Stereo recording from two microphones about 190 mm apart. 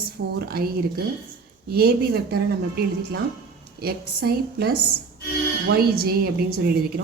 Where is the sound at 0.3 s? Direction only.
55° right (ahead or behind).